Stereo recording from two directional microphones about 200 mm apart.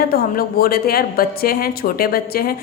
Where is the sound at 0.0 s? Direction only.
50° left (ahead or behind).